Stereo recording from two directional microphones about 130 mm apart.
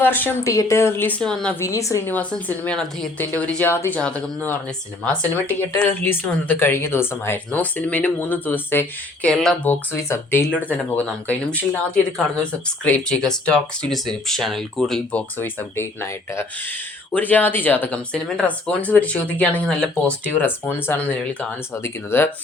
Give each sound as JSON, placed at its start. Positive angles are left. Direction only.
{"t": 0.0, "sound": "speech", "side_deg": 15}
{"t": 1.2, "sound": "speech", "side_deg": 5}
{"t": 1.5, "sound": "speech", "side_deg": 25}
{"t": 2.1, "sound": "speech", "side_deg": 10}
{"t": 9.3, "sound": "speech", "side_deg": 5}
{"t": 9.6, "sound": "speech", "side_deg": 15}
{"t": 15.4, "sound": "speech", "side_deg": 15}